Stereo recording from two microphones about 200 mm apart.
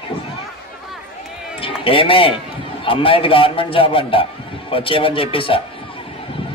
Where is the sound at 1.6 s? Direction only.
25° left (ahead or behind).